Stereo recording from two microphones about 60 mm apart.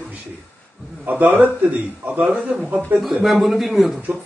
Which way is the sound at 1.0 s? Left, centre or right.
Right.